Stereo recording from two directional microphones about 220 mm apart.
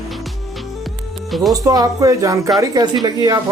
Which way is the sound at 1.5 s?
15° right (ahead or behind).